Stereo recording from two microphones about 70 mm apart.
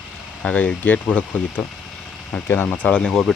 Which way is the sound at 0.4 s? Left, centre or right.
Centre.